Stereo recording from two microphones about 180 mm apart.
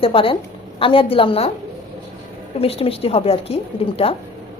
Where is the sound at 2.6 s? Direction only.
30° left (ahead or behind).